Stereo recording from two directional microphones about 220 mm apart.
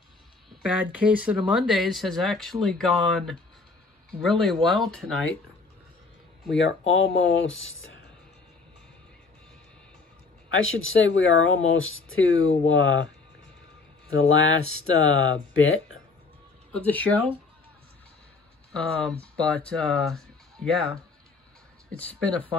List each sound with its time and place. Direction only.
0.5 s speech: 5° right (ahead or behind)
6.5 s speech: 60° left (ahead or behind)
10.5 s speech: 65° left (ahead or behind)
14.1 s speech: 65° left (ahead or behind)
16.7 s speech: 5° left (ahead or behind)
18.7 s speech: 5° left (ahead or behind)